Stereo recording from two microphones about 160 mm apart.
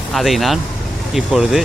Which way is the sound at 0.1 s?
Centre (ahead or behind).